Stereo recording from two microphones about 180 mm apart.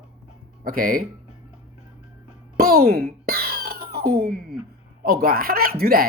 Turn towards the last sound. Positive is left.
turn(degrees=-55)  # may be behind; listen again after turning